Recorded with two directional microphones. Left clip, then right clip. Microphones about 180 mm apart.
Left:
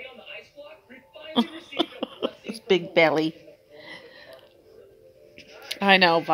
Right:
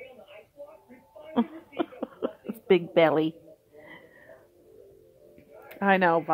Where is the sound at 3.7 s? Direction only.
10° left (ahead or behind).